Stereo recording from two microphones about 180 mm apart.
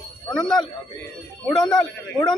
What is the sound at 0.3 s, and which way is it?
A man's voice, centre (ahead or behind).